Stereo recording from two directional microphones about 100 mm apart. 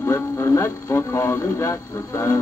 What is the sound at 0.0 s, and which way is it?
Music, 25° left (ahead or behind).